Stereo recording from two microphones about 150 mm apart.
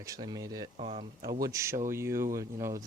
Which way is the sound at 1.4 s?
20° right (ahead or behind).